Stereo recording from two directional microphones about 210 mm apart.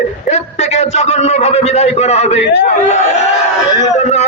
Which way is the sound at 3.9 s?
30° left (ahead or behind).